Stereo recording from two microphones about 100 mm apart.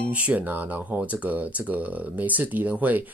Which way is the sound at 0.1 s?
15° right (ahead or behind).